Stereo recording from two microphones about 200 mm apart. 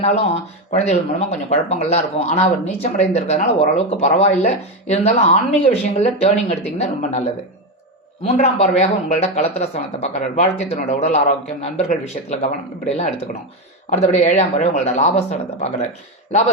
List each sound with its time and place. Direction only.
0.7 s speech: 35° left (ahead or behind)
13.9 s speech: 35° left (ahead or behind)